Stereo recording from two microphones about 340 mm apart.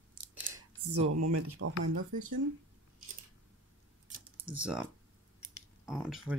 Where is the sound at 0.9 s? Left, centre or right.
Right.